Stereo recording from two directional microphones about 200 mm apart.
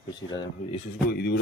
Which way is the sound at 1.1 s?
55° left (ahead or behind).